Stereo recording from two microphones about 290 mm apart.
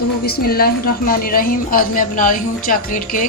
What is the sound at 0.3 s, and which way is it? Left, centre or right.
A woman's voice, left.